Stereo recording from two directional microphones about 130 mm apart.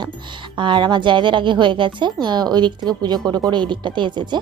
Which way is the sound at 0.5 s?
35° right (ahead or behind).